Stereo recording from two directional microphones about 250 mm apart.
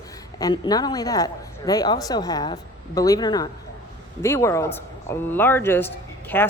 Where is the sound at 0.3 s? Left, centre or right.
Centre.